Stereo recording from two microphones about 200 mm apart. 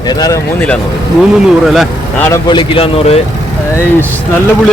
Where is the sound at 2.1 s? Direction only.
10° left (ahead or behind).